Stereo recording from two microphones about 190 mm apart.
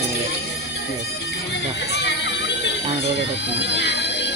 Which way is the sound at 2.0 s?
65° left (ahead or behind).